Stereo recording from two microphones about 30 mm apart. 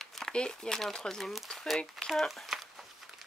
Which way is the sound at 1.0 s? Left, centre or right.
Centre.